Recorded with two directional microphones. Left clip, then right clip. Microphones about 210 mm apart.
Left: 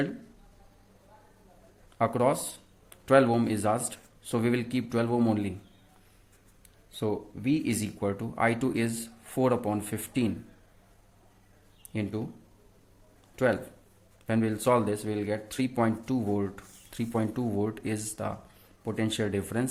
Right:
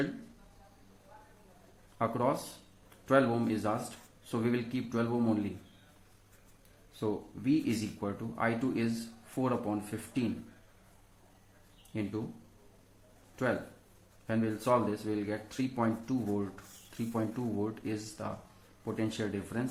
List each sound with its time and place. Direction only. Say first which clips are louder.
2.0 s speech: left 5 dB; 40° left (ahead or behind)
7.0 s speech: left 4 dB; 40° left (ahead or behind)
11.9 s speech: left 3 dB; 40° left (ahead or behind)
13.4 s speech: left 6 dB; 35° left (ahead or behind)